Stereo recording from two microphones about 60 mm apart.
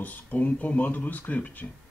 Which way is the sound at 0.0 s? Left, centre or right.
Left.